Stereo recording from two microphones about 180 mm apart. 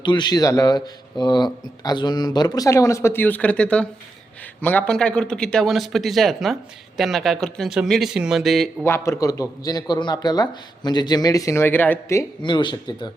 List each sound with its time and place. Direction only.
0.0 s speech: 25° left (ahead or behind); by 8.7 s centre (ahead or behind)
8.8 s a man's voice: 15° left (ahead or behind)
12.4 s speech: 25° left (ahead or behind)